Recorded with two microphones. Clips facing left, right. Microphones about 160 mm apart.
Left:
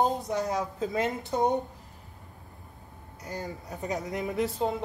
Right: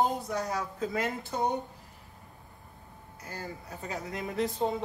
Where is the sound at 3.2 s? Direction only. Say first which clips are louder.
Left 4 dB; 20° left (ahead or behind).